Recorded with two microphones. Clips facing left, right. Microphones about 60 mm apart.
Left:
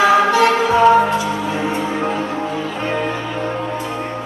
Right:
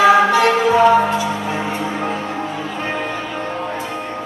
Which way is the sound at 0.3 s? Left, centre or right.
Right.